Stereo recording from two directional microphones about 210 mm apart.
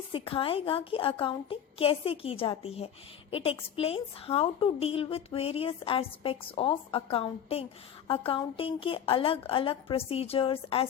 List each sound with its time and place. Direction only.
0.1 s a woman's voice: 25° left (ahead or behind)